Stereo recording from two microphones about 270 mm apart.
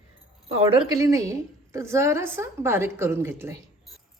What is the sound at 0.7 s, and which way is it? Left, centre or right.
Speech, centre.